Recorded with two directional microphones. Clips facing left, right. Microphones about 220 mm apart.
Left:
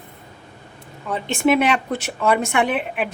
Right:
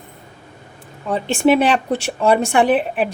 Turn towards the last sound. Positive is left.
turn(degrees=-35)  # may be behind; listen again after turning